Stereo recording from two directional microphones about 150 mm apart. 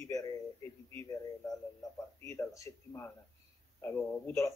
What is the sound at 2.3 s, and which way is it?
A man's voice, 20° left (ahead or behind).